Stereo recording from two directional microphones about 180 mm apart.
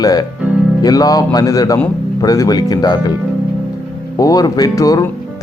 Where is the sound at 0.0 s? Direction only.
20° left (ahead or behind).